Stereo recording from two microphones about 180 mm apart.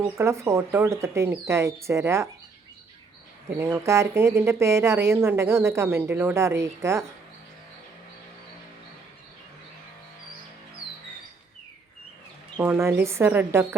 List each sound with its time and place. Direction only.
0.0 s speech: 15° right (ahead or behind)
3.6 s speech: 15° right (ahead or behind)
12.5 s speech: 10° right (ahead or behind)